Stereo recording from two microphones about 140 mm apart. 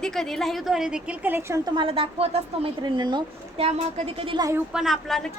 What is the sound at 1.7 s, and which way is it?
Speech, 40° right (ahead or behind).